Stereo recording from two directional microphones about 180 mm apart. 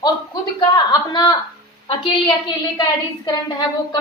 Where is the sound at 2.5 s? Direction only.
25° left (ahead or behind).